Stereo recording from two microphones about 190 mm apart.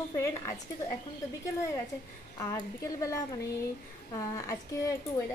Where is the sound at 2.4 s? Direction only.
15° left (ahead or behind).